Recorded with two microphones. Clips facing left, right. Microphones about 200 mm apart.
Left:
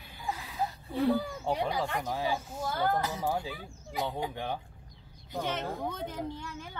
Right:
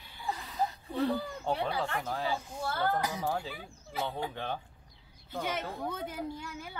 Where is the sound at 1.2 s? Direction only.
15° left (ahead or behind).